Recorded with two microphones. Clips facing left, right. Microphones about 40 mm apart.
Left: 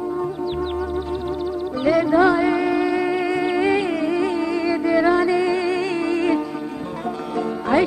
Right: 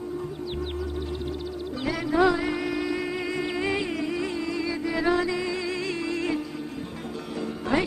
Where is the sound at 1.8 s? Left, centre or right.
Centre.